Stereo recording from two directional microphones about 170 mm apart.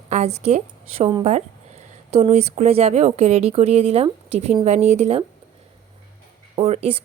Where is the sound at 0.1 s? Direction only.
40° right (ahead or behind).